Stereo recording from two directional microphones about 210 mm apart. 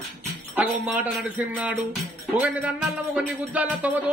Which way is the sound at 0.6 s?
5° right (ahead or behind).